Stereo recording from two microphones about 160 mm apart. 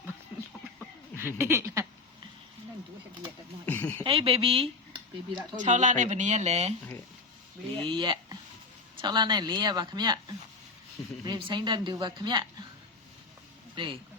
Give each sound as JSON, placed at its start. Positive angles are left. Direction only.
{"t": 1.4, "sound": "a sound", "side_deg": -15}
{"t": 3.7, "sound": "speech", "side_deg": 15}
{"t": 4.0, "sound": "speech", "side_deg": -35}
{"t": 5.6, "sound": "speech", "side_deg": -50}
{"t": 7.8, "sound": "speech", "side_deg": -30}
{"t": 13.7, "sound": "speech", "side_deg": -30}